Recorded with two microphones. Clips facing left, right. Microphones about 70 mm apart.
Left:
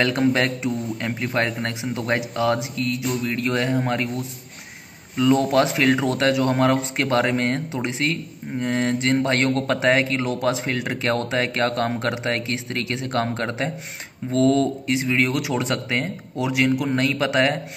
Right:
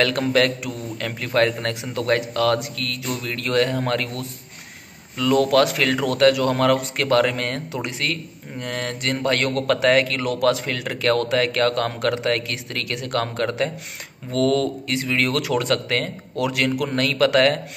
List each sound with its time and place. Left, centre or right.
0.0 s speech: left